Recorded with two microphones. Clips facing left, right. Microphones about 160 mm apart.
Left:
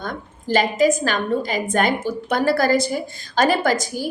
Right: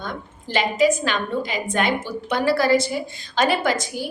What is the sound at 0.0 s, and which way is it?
A woman's voice, 45° left (ahead or behind).